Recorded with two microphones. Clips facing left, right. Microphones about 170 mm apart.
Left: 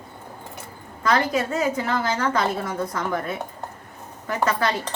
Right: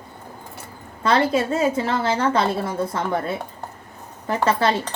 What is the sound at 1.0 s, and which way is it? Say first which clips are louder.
A woman's voice: right 3 dB; 30° right (ahead or behind).